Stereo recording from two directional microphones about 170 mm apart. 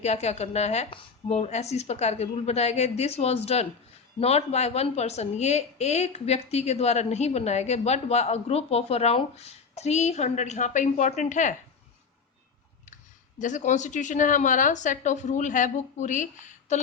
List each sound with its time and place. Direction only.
0.0 s a woman's voice: 40° left (ahead or behind)
13.4 s a woman's voice: 45° left (ahead or behind)